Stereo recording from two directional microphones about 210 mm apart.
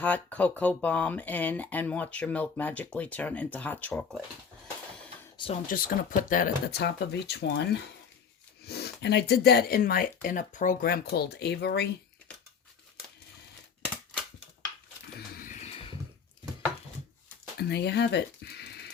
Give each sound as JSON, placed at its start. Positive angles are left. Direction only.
{"t": 0.0, "sound": "speech", "side_deg": 5}
{"t": 5.6, "sound": "speech", "side_deg": 40}
{"t": 15.4, "sound": "a sound", "side_deg": 30}
{"t": 17.6, "sound": "speech", "side_deg": 50}